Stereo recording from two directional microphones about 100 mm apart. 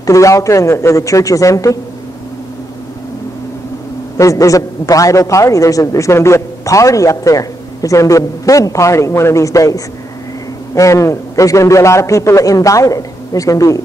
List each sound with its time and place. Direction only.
0.0 s a man's voice: 30° left (ahead or behind)
4.2 s a man's voice: 35° left (ahead or behind)